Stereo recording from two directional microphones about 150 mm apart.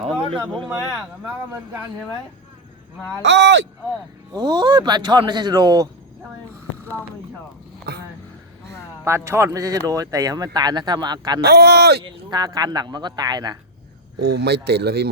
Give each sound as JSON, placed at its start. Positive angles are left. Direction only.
{"t": 0.0, "sound": "speech", "side_deg": -40}
{"t": 0.4, "sound": "speech", "side_deg": 5}
{"t": 0.7, "sound": "speech", "side_deg": -15}
{"t": 4.3, "sound": "speech", "side_deg": -25}
{"t": 7.9, "sound": "a sound", "side_deg": -90}
{"t": 9.0, "sound": "speech", "side_deg": -15}
{"t": 11.3, "sound": "speech", "side_deg": -90}
{"t": 12.0, "sound": "speech", "side_deg": -25}
{"t": 14.2, "sound": "speech", "side_deg": -90}